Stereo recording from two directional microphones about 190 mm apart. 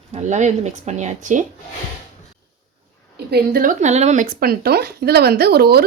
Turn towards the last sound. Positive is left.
turn(degrees=-55)  # may be behind; listen again after turning